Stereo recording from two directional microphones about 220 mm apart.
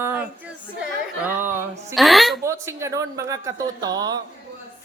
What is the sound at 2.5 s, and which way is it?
A man's voice, 10° right (ahead or behind).